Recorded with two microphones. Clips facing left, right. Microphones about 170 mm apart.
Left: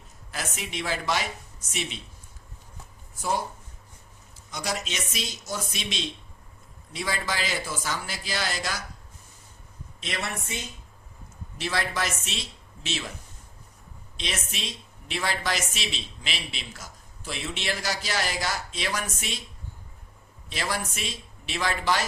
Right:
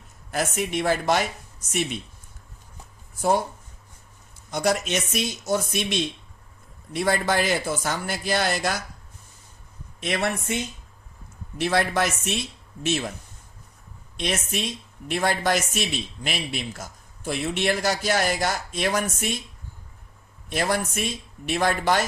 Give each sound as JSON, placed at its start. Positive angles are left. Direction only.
{"t": 0.3, "sound": "a man's voice", "side_deg": -50}
{"t": 3.2, "sound": "speech", "side_deg": -55}
{"t": 4.5, "sound": "a man's voice", "side_deg": -55}
{"t": 10.0, "sound": "a man's voice", "side_deg": -55}
{"t": 11.5, "sound": "a man's voice", "side_deg": -55}
{"t": 14.2, "sound": "a man's voice", "side_deg": -50}
{"t": 20.5, "sound": "a man's voice", "side_deg": -50}